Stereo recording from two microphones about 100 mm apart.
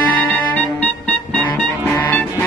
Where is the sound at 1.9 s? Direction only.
20° left (ahead or behind).